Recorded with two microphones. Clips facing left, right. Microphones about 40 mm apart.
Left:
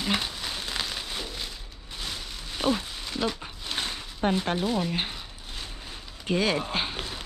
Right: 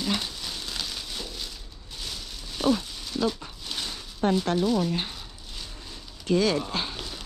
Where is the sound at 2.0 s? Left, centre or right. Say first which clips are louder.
Left 2 dB; left.